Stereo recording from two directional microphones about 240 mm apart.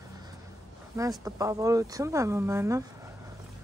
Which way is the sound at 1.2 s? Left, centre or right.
Centre.